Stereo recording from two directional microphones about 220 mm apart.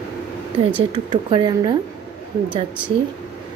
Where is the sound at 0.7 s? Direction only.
20° right (ahead or behind).